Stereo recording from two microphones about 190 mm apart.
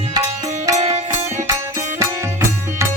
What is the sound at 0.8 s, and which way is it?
Music, 35° right (ahead or behind).